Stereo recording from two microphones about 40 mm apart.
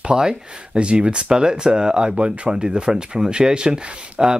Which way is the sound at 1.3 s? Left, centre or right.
Centre.